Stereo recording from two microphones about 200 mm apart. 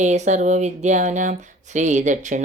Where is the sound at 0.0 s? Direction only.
35° right (ahead or behind).